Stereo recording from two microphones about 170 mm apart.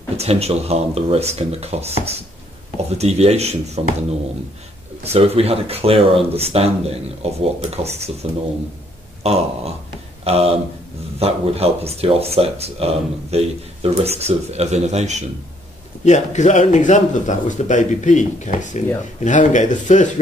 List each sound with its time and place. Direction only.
0.2 s speech: 40° right (ahead or behind)
5.0 s speech: 35° right (ahead or behind)
16.1 s speech: 45° left (ahead or behind)